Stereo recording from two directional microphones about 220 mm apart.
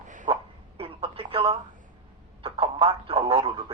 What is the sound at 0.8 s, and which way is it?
Telephone, 25° right (ahead or behind).